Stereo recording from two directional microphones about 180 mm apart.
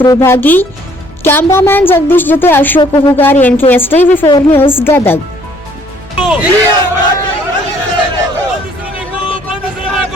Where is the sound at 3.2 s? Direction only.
10° left (ahead or behind).